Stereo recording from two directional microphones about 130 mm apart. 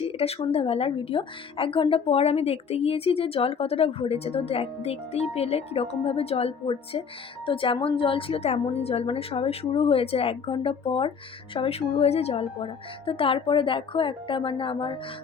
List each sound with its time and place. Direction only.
0.0 s a woman's voice: 50° left (ahead or behind)